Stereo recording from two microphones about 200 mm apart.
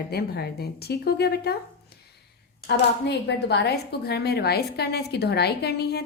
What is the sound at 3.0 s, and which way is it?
A woman's voice, 55° left (ahead or behind).